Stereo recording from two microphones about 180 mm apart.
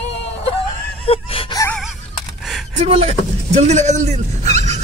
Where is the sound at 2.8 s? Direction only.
35° right (ahead or behind).